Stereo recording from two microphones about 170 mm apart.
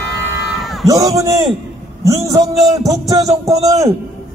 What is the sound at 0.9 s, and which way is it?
A man's voice, 20° right (ahead or behind).